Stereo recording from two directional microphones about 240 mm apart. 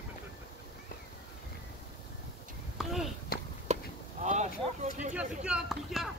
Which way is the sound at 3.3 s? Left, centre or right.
Left.